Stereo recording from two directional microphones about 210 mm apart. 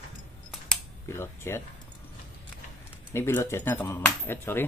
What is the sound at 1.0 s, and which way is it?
Speech, 10° left (ahead or behind).